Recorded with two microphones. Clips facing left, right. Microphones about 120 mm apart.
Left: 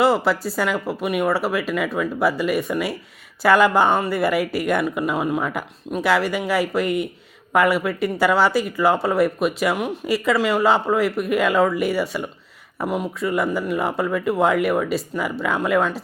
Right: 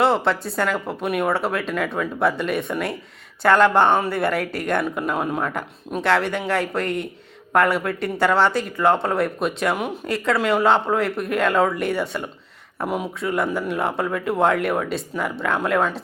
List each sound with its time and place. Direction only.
0.0 s speech: 5° left (ahead or behind)